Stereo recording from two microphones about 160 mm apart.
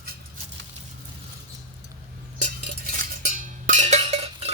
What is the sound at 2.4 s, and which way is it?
Cowbell, 65° right (ahead or behind).